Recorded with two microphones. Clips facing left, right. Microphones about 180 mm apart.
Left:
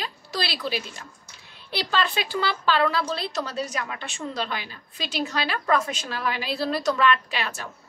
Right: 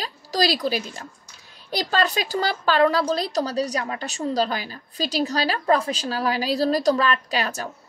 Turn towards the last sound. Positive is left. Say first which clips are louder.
# right 5 dB
turn(degrees=-40)  # may be behind; listen again after turning